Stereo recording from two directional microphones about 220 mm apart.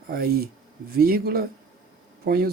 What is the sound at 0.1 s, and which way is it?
Speech, 45° right (ahead or behind).